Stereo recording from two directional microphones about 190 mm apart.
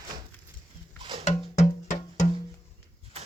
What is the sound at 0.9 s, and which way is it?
Music, 25° right (ahead or behind).